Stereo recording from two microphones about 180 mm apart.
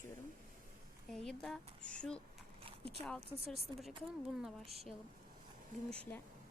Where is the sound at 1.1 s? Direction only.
Centre (ahead or behind).